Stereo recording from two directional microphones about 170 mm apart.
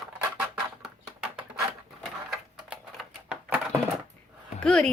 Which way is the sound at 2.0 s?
Centre (ahead or behind).